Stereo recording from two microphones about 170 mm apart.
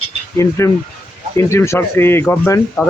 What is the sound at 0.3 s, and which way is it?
Speech, 15° left (ahead or behind).